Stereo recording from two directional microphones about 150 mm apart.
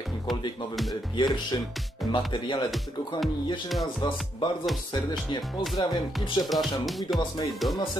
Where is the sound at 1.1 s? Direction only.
30° left (ahead or behind).